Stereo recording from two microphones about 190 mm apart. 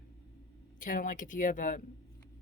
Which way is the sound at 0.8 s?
45° left (ahead or behind).